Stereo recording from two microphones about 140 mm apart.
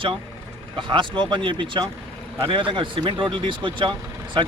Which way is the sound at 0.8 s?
35° right (ahead or behind).